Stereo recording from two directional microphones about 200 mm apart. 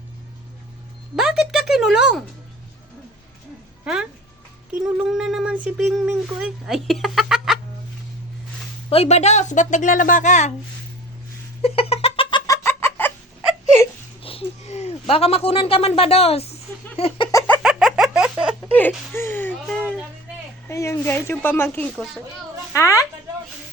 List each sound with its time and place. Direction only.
1.1 s speech: 5° right (ahead or behind)
3.8 s speech: 5° right (ahead or behind)
8.9 s a woman's voice: 30° left (ahead or behind)
11.6 s cat: 30° left (ahead or behind)
12.5 s chicken: 10° left (ahead or behind)
14.2 s a sound: 30° left (ahead or behind)
17.0 s a woman's voice: 30° left (ahead or behind)
17.3 s a sound: 10° left (ahead or behind)
17.6 s a sound: 5° right (ahead or behind)
18.7 s speech: 10° left (ahead or behind)
20.7 s speech: 15° left (ahead or behind)
22.7 s speech: 15° left (ahead or behind)